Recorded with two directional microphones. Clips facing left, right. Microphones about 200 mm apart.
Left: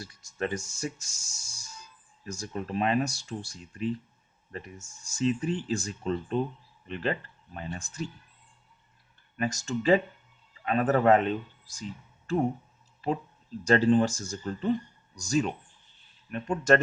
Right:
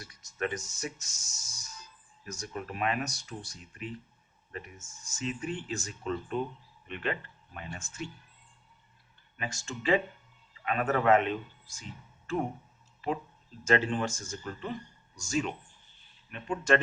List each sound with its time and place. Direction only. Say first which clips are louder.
0.0 s speech: left 2 dB; 30° left (ahead or behind)
9.4 s speech: left 8 dB; 40° left (ahead or behind)
13.7 s speech: left 6 dB; 35° left (ahead or behind)